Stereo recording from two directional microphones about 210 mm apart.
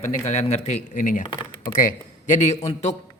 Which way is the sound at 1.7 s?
40° left (ahead or behind).